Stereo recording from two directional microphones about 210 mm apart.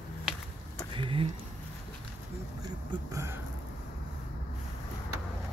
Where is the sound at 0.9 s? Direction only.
25° right (ahead or behind).